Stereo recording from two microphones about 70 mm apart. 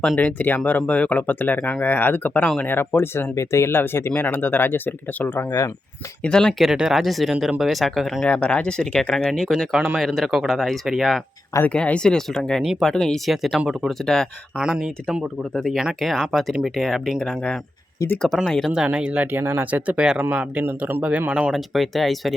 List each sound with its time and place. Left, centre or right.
0.2 s speech: left
5.5 s speech: left
6.2 s speech: centre
6.6 s speech: centre
8.2 s speech: centre
11.6 s speech: centre
14.6 s speech: centre
15.6 s speech: centre
18.9 s speech: centre; by 19.8 s right
19.9 s speech: centre
20.1 s speech: right
21.5 s speech: centre